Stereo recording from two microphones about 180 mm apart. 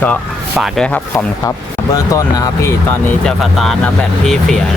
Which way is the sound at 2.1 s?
15° left (ahead or behind).